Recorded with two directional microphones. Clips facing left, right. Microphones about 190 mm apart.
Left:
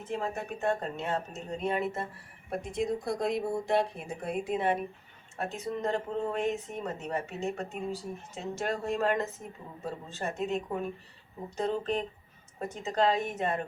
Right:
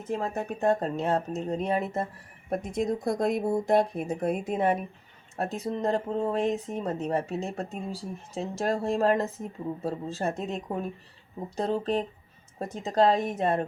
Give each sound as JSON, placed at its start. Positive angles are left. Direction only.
{"t": 0.1, "sound": "speech", "side_deg": -40}